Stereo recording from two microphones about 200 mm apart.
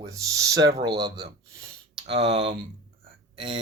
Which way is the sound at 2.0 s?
25° right (ahead or behind).